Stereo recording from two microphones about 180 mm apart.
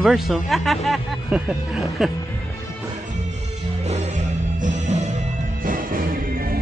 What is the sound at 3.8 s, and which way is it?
Music, 40° right (ahead or behind).